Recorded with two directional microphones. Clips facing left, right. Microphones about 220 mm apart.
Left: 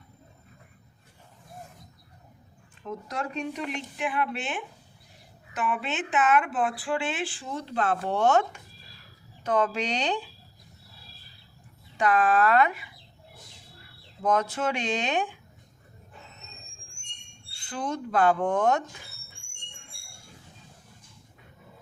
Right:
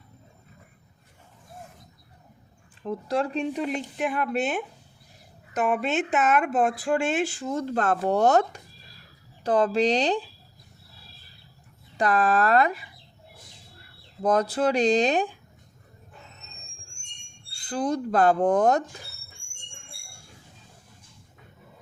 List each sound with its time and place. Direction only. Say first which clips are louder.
2.8 s speech: right 7 dB; 30° right (ahead or behind)
11.9 s speech: even; 35° right (ahead or behind)
14.2 s speech: right 3 dB; 35° right (ahead or behind)
17.5 s speech: right 6 dB; 35° right (ahead or behind)